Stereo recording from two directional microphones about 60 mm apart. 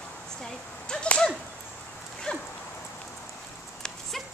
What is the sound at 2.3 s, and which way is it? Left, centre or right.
Dog, centre.